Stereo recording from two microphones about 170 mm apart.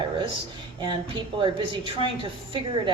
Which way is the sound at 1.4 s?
30° right (ahead or behind).